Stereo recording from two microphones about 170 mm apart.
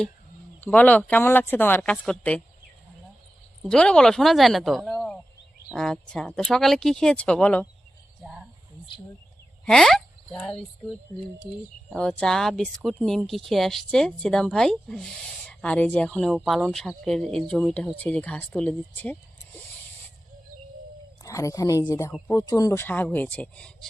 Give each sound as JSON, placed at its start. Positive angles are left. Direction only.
{"t": 0.6, "sound": "speech", "side_deg": 10}
{"t": 3.6, "sound": "speech", "side_deg": 5}
{"t": 8.2, "sound": "a sound", "side_deg": -5}
{"t": 9.6, "sound": "speech", "side_deg": 0}
{"t": 11.9, "sound": "speech", "side_deg": 5}
{"t": 21.2, "sound": "speech", "side_deg": 20}